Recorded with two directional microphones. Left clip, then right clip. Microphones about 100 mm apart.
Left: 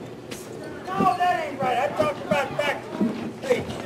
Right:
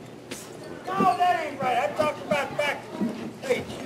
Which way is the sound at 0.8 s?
55° right (ahead or behind).